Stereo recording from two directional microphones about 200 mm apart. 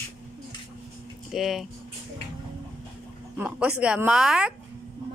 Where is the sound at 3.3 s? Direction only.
5° right (ahead or behind).